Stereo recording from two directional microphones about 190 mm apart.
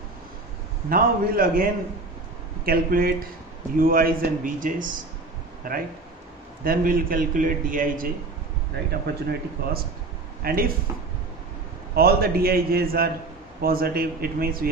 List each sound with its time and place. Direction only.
0.9 s a man's voice: 50° right (ahead or behind)
2.6 s a man's voice: 50° right (ahead or behind)
11.9 s a man's voice: 55° right (ahead or behind)